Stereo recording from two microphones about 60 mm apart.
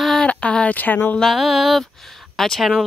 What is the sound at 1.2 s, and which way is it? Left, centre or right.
Mantra, centre.